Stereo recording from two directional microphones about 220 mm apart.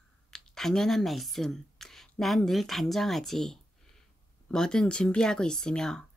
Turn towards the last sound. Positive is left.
turn(degrees=0)  # may be behind; listen again after turning